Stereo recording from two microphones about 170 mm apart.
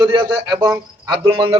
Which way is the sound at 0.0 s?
25° right (ahead or behind).